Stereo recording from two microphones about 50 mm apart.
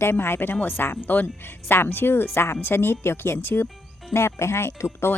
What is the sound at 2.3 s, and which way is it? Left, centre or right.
Speech, left.